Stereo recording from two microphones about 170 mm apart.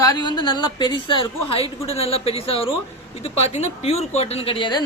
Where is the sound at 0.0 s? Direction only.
25° left (ahead or behind).